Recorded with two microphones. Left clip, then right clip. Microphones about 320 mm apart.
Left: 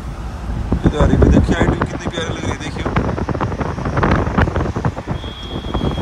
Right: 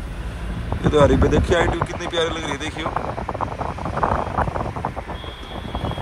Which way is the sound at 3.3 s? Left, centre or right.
Left.